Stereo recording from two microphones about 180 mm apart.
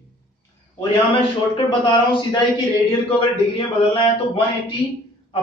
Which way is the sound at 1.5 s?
25° left (ahead or behind).